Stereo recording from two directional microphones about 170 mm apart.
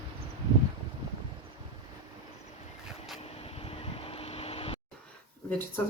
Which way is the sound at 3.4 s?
35° left (ahead or behind).